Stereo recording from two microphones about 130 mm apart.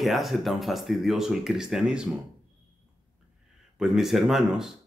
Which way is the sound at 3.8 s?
Centre (ahead or behind).